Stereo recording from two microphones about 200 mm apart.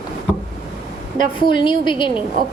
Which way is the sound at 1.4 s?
25° left (ahead or behind).